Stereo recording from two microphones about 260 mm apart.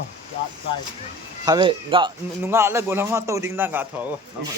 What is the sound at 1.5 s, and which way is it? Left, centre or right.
A man's voice, centre.